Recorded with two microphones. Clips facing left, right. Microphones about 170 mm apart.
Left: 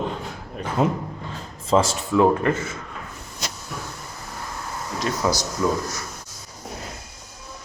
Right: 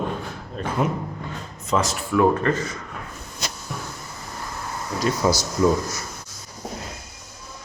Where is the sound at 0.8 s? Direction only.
25° left (ahead or behind).